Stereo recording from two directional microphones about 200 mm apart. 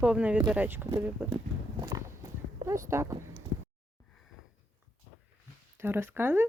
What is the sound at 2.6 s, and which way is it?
Speech, 15° right (ahead or behind).